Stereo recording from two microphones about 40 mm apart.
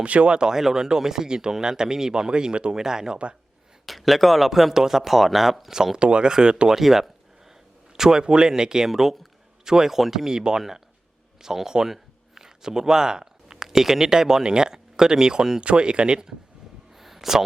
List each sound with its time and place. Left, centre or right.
0.0 s speech: right; by 3.2 s centre
3.8 s speech: centre
5.7 s speech: centre
6.0 s speech: right
6.7 s a man's voice: centre
17.0 s a sound: centre